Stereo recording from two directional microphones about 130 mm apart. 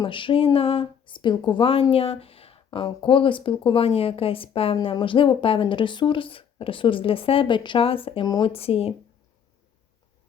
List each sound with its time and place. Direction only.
0.0 s speech: 40° left (ahead or behind)